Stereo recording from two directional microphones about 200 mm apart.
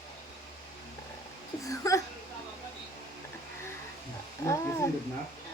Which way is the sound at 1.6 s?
15° left (ahead or behind).